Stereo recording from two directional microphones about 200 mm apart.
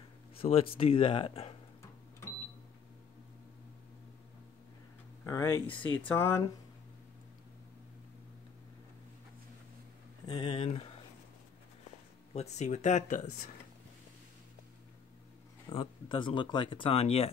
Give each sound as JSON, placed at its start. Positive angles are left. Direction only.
{"t": 0.4, "sound": "speech", "side_deg": 30}
{"t": 5.2, "sound": "speech", "side_deg": 15}
{"t": 10.2, "sound": "speech", "side_deg": 25}
{"t": 12.4, "sound": "speech", "side_deg": 35}
{"t": 15.7, "sound": "speech", "side_deg": 25}